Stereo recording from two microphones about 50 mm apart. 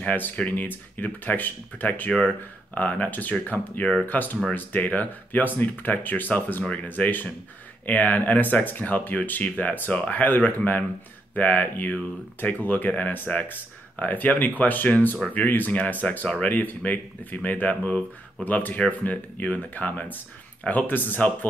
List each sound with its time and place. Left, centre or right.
0.5 s speech: left